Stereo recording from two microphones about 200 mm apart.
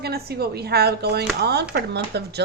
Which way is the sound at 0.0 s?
50° right (ahead or behind).